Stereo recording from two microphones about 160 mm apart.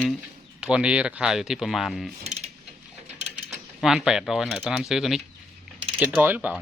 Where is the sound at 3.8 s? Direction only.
Centre (ahead or behind).